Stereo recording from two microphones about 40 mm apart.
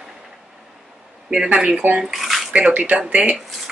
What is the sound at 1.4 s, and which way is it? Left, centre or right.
Speech, right.